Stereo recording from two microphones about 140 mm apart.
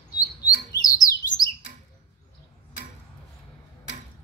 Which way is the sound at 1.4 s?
30° left (ahead or behind).